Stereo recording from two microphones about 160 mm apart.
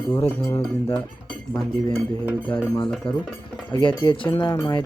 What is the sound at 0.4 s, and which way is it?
Speech, 15° left (ahead or behind).